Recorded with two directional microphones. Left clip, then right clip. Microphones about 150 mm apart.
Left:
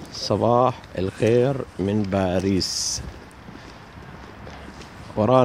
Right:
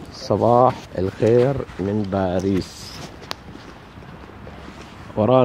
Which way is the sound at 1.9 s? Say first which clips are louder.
Right 1 dB; 20° left (ahead or behind).